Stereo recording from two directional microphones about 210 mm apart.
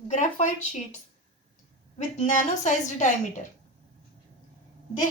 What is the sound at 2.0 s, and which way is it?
A woman's voice, 35° left (ahead or behind).